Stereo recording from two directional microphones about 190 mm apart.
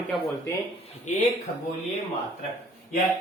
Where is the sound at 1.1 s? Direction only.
40° left (ahead or behind).